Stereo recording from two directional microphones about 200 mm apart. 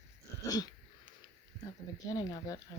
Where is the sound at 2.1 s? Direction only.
15° left (ahead or behind).